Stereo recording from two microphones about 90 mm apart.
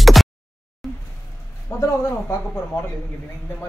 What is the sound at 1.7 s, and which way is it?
Speech, 25° left (ahead or behind).